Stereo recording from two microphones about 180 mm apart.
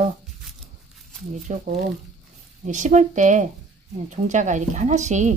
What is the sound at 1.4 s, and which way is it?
A woman's voice, 45° right (ahead or behind).